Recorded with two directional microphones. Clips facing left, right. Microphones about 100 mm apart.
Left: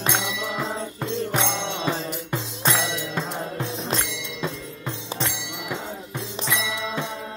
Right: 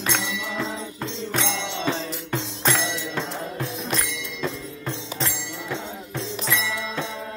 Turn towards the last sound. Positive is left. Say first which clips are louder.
# even
turn(degrees=15)  # may be behind; listen again after turning